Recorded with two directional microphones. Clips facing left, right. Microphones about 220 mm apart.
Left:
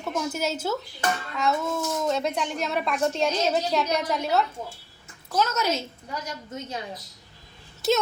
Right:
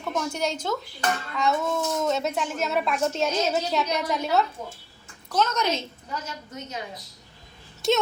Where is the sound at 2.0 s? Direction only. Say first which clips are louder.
Even; centre (ahead or behind).